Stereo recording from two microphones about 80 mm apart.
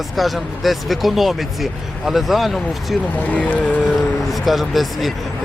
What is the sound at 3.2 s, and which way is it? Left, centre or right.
Speech, centre.